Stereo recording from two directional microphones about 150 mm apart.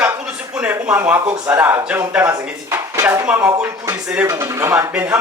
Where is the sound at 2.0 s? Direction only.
10° right (ahead or behind).